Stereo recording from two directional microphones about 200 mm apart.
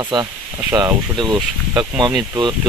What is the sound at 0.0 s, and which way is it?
Speech, 20° right (ahead or behind).